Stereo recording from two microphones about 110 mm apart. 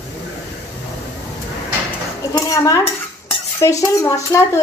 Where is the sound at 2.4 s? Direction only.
30° left (ahead or behind).